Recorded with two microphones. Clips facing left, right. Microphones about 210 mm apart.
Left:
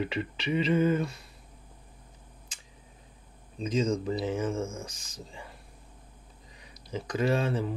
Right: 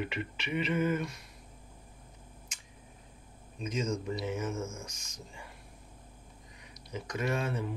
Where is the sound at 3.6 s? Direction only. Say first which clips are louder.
Left 6 dB; 30° left (ahead or behind).